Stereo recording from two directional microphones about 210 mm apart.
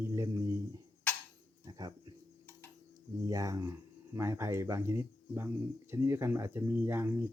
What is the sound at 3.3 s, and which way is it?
Speech, 15° right (ahead or behind).